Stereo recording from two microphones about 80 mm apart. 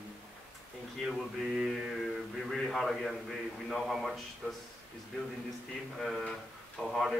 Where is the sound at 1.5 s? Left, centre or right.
Centre.